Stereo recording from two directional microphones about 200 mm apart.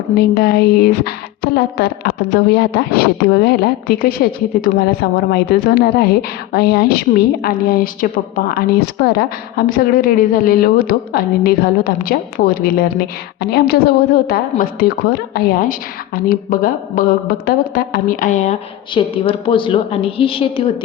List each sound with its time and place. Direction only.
0.2 s a woman's voice: 55° left (ahead or behind); by 18.5 s 40° left (ahead or behind)
18.9 s a woman's voice: 25° left (ahead or behind)